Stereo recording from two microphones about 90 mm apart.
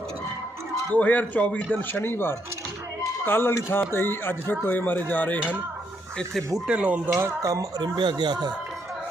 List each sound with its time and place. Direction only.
0.9 s a man's voice: 20° left (ahead or behind)
6.7 s speech: 15° right (ahead or behind)
7.2 s speech: 30° right (ahead or behind)
7.8 s speech: 55° right (ahead or behind)